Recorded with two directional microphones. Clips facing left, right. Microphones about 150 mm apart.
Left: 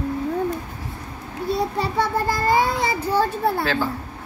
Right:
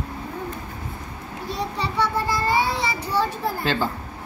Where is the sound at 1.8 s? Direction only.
45° left (ahead or behind).